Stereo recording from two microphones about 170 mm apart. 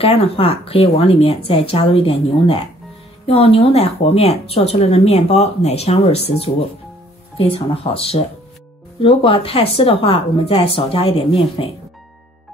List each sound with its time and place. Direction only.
0.0 s speech: 35° left (ahead or behind)